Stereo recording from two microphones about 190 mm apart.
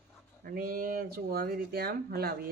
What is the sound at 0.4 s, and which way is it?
Speech, 50° right (ahead or behind).